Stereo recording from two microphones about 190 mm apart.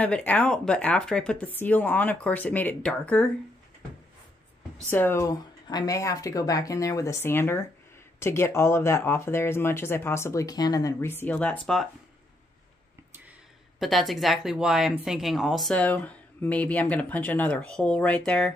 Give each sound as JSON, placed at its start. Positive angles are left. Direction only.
{"t": 0.0, "sound": "speech", "side_deg": 10}
{"t": 4.8, "sound": "speech", "side_deg": 10}
{"t": 13.7, "sound": "speech", "side_deg": 0}